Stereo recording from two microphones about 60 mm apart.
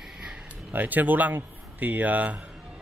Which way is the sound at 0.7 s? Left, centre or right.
Right.